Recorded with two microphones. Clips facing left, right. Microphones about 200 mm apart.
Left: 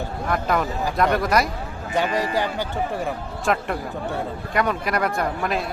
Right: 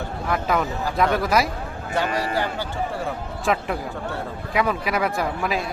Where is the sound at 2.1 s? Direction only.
15° left (ahead or behind).